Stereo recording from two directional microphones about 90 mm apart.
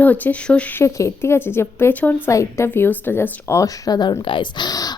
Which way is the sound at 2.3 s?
35° left (ahead or behind).